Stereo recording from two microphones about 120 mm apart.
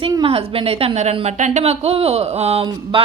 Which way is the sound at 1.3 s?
85° right.